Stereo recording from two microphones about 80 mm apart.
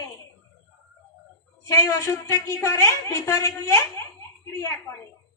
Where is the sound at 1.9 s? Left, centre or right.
Left.